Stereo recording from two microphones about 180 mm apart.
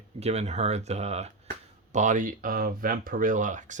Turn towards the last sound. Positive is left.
turn(degrees=-45)  # may be behind; listen again after turning